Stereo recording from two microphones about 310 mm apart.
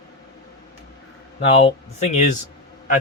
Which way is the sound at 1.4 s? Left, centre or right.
Centre.